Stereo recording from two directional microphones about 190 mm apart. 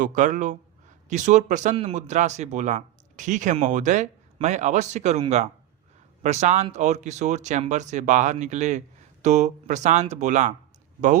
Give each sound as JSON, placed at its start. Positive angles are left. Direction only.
{"t": 0.0, "sound": "speech", "side_deg": -40}
{"t": 6.2, "sound": "speech", "side_deg": -35}